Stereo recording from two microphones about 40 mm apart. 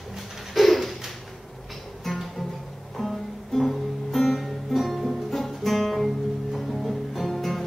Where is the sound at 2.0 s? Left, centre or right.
Centre.